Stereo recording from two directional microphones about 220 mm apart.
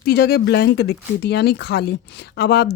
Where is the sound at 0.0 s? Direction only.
45° left (ahead or behind).